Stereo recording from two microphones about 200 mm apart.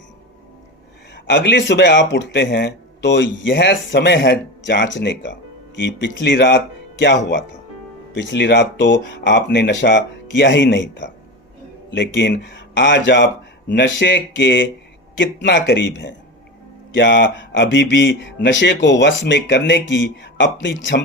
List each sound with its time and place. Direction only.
1.1 s speech: 65° left (ahead or behind)
8.1 s speech: 65° left (ahead or behind)